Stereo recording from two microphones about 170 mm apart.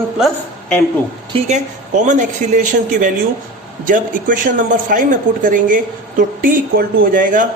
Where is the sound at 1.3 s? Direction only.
45° right (ahead or behind).